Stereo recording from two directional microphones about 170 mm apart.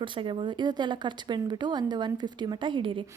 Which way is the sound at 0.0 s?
30° right (ahead or behind).